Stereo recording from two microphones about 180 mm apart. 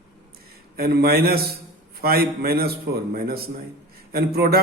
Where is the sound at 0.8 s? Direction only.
60° right (ahead or behind).